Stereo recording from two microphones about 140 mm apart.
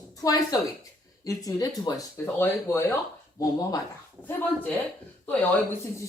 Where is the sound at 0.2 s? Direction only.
25° left (ahead or behind).